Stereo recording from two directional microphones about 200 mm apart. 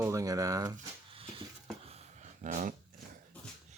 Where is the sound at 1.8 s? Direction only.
35° right (ahead or behind).